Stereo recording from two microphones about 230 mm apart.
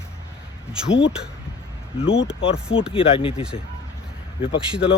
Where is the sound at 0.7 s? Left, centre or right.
Centre.